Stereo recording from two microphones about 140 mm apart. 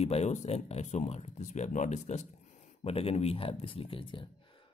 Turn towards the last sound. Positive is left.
turn(degrees=35)  # may be behind; listen again after turning